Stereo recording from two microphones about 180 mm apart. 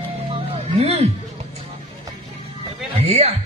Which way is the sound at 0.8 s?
35° right (ahead or behind).